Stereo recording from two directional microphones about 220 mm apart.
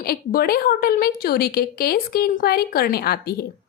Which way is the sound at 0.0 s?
45° left (ahead or behind).